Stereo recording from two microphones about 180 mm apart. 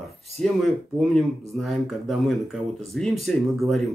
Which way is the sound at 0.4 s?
Centre (ahead or behind).